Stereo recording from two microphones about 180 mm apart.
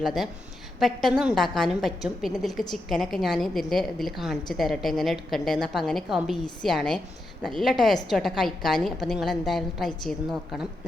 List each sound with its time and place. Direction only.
0.0 s a woman's voice: centre (ahead or behind)